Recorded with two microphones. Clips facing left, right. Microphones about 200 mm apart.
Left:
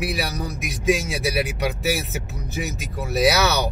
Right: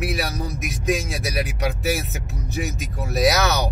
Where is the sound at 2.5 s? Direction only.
Centre (ahead or behind).